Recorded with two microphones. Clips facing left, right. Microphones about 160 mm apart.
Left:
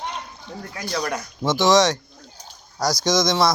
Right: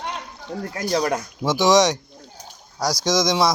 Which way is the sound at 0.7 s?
40° right (ahead or behind).